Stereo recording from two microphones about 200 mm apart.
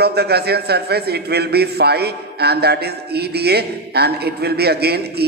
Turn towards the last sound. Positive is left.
turn(degrees=-55)  # may be behind; listen again after turning